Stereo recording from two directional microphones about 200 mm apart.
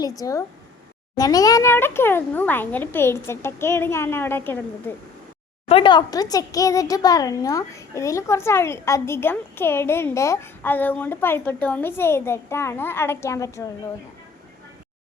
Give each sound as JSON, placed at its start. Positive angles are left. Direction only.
{"t": 0.2, "sound": "speech", "side_deg": 15}
{"t": 5.6, "sound": "speech", "side_deg": 25}